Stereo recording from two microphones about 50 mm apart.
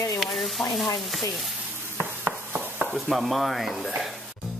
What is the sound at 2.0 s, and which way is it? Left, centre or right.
Chopping, right.